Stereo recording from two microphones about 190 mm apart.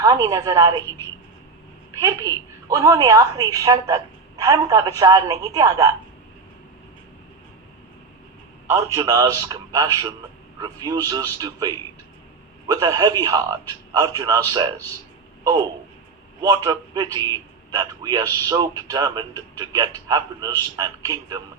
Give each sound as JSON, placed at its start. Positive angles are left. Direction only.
{"t": 0.0, "sound": "a woman's voice", "side_deg": -20}
{"t": 2.0, "sound": "a woman's voice", "side_deg": -20}
{"t": 8.6, "sound": "a man's voice", "side_deg": -15}
{"t": 16.4, "sound": "a woman's voice", "side_deg": -20}